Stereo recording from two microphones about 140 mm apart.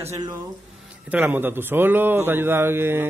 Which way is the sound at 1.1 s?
15° right (ahead or behind).